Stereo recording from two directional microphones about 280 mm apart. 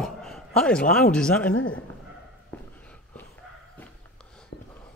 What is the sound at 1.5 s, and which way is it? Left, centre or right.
Speech, left.